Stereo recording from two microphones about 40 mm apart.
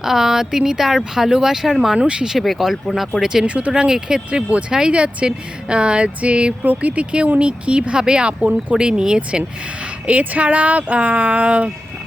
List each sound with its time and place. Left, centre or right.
0.0 s speech: centre
2.0 s speech: right
2.4 s speech: centre
3.4 s speech: right
3.7 s speech: centre
4.3 s speech: right
10.1 s speech: right